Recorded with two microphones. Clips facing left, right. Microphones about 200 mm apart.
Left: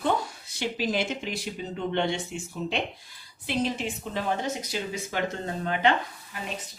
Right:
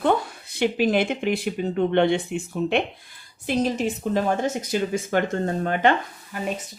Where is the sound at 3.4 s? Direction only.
45° right (ahead or behind).